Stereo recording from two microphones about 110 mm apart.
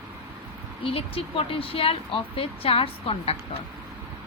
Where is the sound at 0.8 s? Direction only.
60° left (ahead or behind).